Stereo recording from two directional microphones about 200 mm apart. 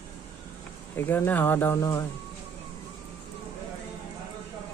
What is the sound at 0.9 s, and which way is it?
Speech, 10° left (ahead or behind).